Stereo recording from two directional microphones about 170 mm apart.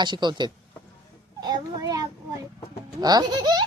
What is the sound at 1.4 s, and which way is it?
Child singing, 25° right (ahead or behind).